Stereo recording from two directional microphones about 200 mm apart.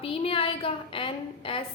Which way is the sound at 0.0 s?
30° left (ahead or behind).